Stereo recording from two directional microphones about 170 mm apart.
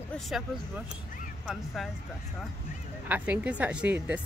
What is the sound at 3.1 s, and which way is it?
Speech, 10° right (ahead or behind).